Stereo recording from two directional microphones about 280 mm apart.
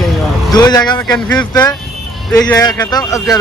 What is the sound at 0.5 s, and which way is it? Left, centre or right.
A man's voice, centre.